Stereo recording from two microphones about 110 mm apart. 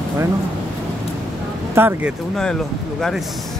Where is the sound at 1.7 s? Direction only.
20° right (ahead or behind).